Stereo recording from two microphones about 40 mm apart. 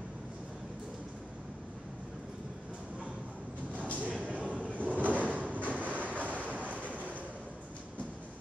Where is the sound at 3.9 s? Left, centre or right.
Right.